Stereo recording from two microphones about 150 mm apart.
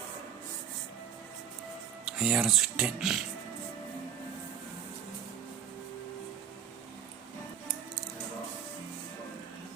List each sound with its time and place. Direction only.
2.0 s speech: 5° right (ahead or behind)